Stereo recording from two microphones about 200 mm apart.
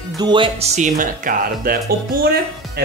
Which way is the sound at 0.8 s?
45° right (ahead or behind).